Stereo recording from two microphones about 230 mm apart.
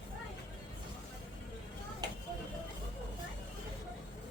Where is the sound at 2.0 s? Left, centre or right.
Centre.